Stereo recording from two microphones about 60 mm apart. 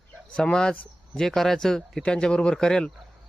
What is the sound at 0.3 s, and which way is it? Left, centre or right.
Speech, centre.